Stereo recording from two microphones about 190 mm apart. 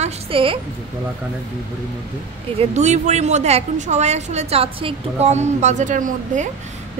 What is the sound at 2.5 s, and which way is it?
A woman's voice, 35° right (ahead or behind).